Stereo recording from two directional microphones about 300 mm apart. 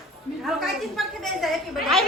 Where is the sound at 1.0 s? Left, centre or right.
Centre.